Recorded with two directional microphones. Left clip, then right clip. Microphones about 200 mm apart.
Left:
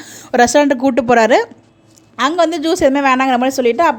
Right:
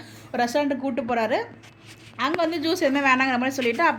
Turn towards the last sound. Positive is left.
turn(degrees=35)  # may be behind; listen again after turning